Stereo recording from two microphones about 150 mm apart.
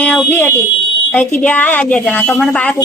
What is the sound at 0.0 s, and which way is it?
Speech, 10° left (ahead or behind).